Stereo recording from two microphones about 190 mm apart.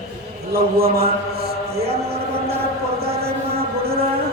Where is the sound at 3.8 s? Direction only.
55° right (ahead or behind).